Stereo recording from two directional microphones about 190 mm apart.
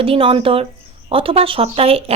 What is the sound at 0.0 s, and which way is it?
Speech, 30° right (ahead or behind).